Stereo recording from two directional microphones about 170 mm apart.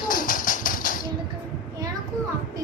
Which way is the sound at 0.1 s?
55° left (ahead or behind).